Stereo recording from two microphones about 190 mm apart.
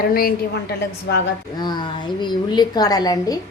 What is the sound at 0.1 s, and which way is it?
Speech, 50° left (ahead or behind).